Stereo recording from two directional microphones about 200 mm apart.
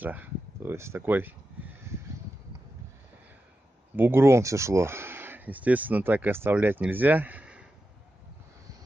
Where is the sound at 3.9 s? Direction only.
10° right (ahead or behind).